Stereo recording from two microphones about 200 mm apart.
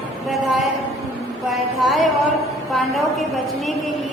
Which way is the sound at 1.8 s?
Centre (ahead or behind).